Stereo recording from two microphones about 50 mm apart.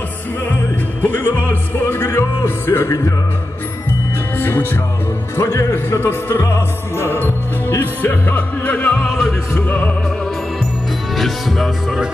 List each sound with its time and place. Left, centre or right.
1.0 s music: left
4.4 s music: left
5.3 s speech: left
5.9 s music: left
9.0 s music: centre
9.7 s music: left
11.1 s music: centre